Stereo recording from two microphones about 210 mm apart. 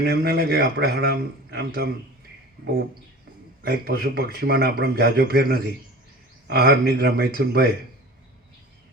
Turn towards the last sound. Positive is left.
turn(degrees=-50)  # may be behind; listen again after turning